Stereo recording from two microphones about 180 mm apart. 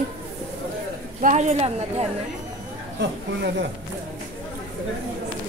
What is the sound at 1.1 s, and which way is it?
Speech, 40° right (ahead or behind).